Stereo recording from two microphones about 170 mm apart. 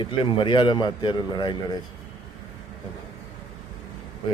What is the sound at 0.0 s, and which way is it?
A man's voice, 30° left (ahead or behind).